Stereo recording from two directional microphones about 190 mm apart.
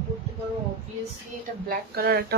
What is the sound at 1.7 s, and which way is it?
Speech, 55° right (ahead or behind).